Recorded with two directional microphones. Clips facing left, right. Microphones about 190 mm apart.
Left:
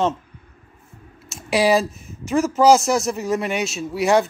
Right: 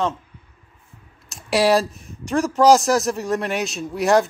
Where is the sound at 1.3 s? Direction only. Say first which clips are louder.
Even; centre (ahead or behind).